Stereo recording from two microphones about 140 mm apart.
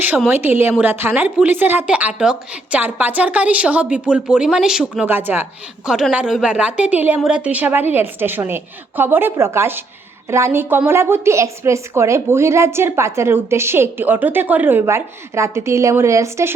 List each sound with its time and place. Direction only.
0.3 s a woman's voice: 15° right (ahead or behind)